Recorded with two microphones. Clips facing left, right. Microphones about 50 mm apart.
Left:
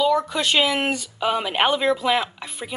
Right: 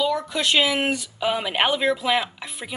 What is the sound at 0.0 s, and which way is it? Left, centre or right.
Speech, centre.